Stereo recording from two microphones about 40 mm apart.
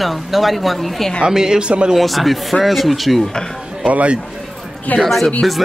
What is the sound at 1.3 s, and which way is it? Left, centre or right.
Speech, centre.